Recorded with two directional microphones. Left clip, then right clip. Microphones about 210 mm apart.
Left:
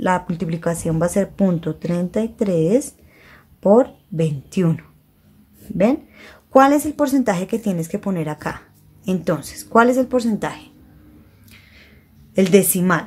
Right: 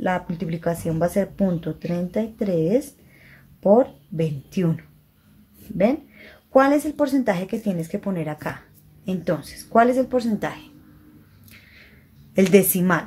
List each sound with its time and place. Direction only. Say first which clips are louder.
0.0 s a woman's voice: left 5 dB; 15° left (ahead or behind)
12.4 s a woman's voice: left 2 dB; 5° left (ahead or behind)